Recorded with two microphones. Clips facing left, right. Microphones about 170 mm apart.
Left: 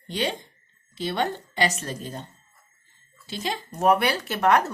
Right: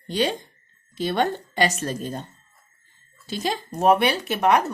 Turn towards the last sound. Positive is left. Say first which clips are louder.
# right 1 dB
turn(degrees=-15)  # may be behind; listen again after turning